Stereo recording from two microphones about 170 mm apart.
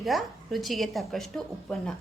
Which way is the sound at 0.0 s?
Centre (ahead or behind).